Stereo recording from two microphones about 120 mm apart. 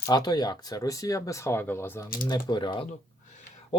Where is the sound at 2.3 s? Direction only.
35° left (ahead or behind).